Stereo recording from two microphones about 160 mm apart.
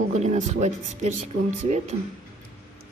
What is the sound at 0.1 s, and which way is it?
Speech, 45° right (ahead or behind).